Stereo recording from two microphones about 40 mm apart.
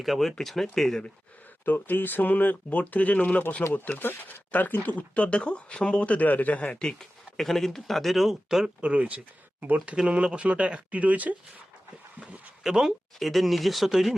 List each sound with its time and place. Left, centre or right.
0.0 s speech: centre
1.6 s speech: left
2.7 s speech: left
4.0 s speech: left
6.7 s speech: centre
7.3 s speech: centre
8.4 s speech: centre
8.8 s speech: right
10.2 s speech: right
12.6 s speech: centre
13.1 s speech: centre